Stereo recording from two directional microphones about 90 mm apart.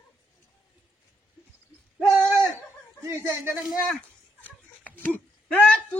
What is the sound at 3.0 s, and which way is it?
Speech, 30° right (ahead or behind).